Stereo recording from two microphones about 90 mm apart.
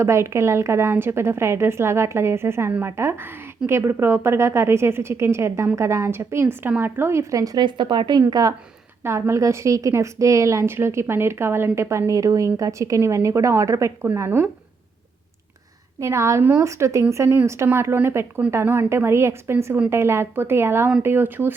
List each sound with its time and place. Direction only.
0.0 s a woman's voice: 30° right (ahead or behind)
7.6 s speech: 60° right (ahead or behind)
8.3 s speech: 45° right (ahead or behind)
9.0 s a woman's voice: 30° right (ahead or behind)
16.0 s a woman's voice: 35° right (ahead or behind)